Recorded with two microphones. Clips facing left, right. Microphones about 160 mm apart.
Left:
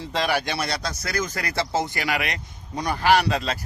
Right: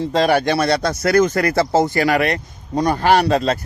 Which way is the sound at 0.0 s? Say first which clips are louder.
Right 9 dB; 40° right (ahead or behind).